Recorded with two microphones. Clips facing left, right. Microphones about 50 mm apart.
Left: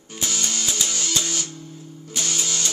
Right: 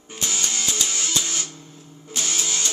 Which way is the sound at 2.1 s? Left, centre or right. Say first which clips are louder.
Even; centre.